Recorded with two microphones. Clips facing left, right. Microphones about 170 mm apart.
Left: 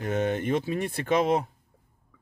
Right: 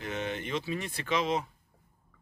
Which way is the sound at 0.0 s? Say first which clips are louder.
Left 8 dB; 50° left (ahead or behind).